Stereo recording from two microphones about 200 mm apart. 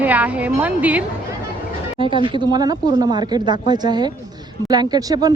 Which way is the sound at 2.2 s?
25° right (ahead or behind).